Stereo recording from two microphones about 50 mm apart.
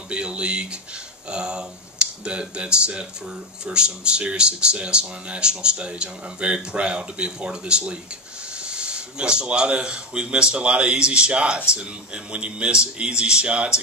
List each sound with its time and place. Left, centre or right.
0.1 s speech: right